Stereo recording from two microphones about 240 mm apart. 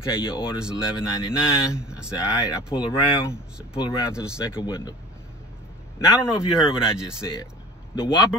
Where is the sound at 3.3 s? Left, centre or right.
Centre.